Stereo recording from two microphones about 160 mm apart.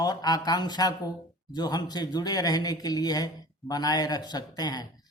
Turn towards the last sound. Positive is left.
turn(degrees=25)  # may be behind; listen again after turning